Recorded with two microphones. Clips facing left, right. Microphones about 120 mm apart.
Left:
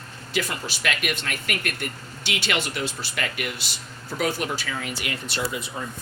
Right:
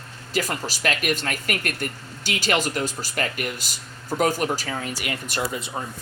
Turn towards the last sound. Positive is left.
turn(degrees=-40)  # may be behind; listen again after turning